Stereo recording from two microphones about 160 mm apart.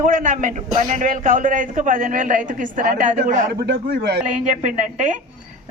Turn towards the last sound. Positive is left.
turn(degrees=-50)  # may be behind; listen again after turning